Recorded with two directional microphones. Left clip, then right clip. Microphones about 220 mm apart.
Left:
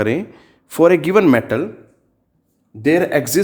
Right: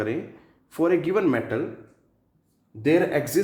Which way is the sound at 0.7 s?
50° left (ahead or behind).